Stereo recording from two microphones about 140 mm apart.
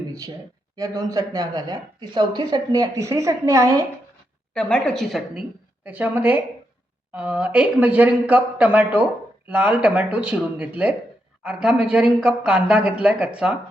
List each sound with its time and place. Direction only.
0.1 s a woman's voice: 25° right (ahead or behind)
4.5 s a woman's voice: 5° left (ahead or behind)